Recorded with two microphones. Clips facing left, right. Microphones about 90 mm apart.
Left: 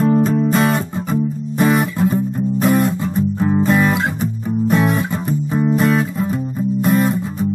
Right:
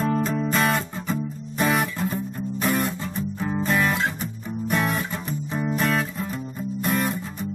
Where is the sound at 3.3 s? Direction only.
40° left (ahead or behind).